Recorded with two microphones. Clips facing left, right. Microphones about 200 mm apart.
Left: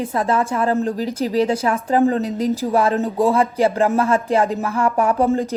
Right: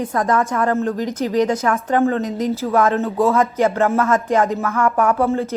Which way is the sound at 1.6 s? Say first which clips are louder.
Left 1 dB; 30° left (ahead or behind).